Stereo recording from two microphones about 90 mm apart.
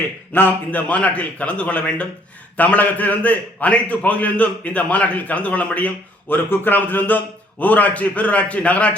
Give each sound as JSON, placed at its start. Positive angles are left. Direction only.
{"t": 0.3, "sound": "a man's voice", "side_deg": 20}